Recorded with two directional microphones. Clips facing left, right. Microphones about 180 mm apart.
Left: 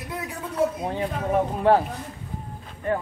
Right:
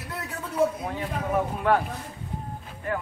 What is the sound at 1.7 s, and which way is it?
Speech, 30° left (ahead or behind).